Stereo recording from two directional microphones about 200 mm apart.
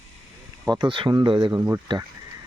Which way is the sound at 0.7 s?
25° right (ahead or behind).